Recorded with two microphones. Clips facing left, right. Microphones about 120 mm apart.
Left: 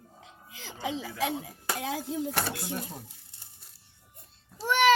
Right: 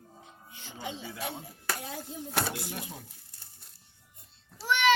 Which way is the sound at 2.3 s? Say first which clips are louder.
Left 1 dB; centre (ahead or behind).